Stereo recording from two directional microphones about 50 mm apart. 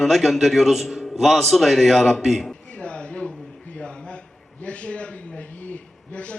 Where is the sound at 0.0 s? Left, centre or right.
Centre.